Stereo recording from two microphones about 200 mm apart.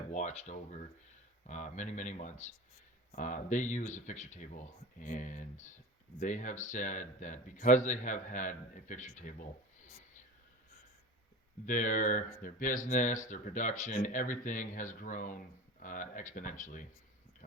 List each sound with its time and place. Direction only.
0.1 s speech: 35° left (ahead or behind)
11.6 s speech: 40° left (ahead or behind)